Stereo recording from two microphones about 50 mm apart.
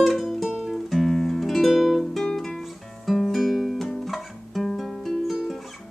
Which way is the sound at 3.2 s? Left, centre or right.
Centre.